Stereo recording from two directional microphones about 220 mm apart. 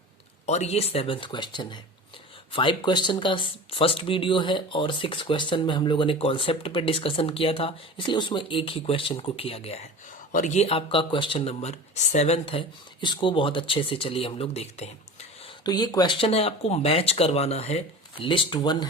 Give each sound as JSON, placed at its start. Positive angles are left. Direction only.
{"t": 0.4, "sound": "speech", "side_deg": 30}